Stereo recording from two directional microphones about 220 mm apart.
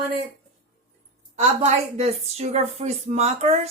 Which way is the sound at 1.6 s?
30° right (ahead or behind).